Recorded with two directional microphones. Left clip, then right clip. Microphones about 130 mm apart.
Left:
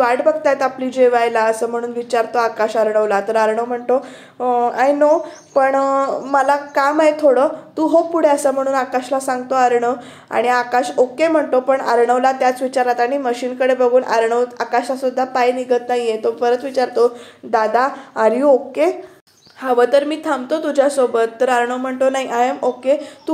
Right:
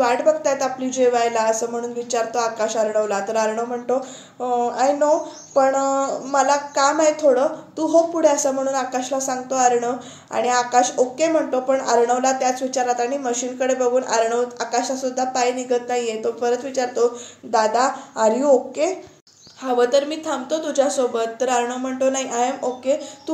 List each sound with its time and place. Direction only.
0.0 s a woman's voice: 35° left (ahead or behind)